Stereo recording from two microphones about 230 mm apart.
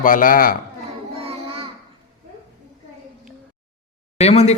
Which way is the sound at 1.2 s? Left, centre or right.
Right.